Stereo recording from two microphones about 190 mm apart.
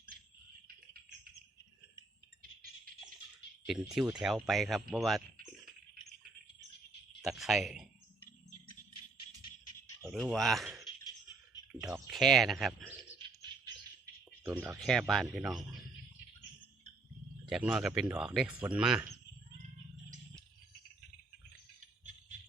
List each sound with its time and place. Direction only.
3.7 s speech: centre (ahead or behind)
7.2 s speech: centre (ahead or behind)
10.1 s speech: centre (ahead or behind)
11.7 s a sound: 5° right (ahead or behind)
12.1 s speech: centre (ahead or behind)
13.5 s bird: 25° right (ahead or behind)
14.0 s a sound: 10° right (ahead or behind)
14.8 s speech: centre (ahead or behind)
17.5 s speech: centre (ahead or behind)